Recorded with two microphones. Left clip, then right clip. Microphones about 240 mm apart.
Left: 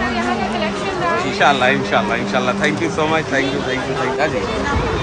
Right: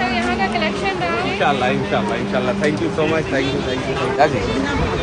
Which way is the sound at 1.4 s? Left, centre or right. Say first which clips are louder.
Left 5 dB; centre.